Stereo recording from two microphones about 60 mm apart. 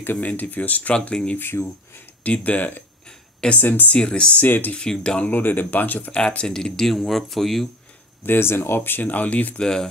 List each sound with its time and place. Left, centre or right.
0.0 s speech: left
1.5 s speech: left
2.2 s speech: left
3.1 s a sound: centre
3.5 s speech: left
3.9 s speech: centre
4.4 s speech: left
4.7 s speech: centre
5.3 s speech: left
6.1 s speech: centre
8.3 s speech: left
9.6 s speech: centre